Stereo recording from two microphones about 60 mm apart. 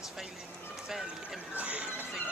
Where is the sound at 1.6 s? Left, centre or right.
Right.